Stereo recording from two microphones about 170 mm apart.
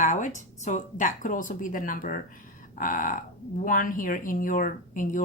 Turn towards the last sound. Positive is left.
turn(degrees=50)  # may be behind; listen again after turning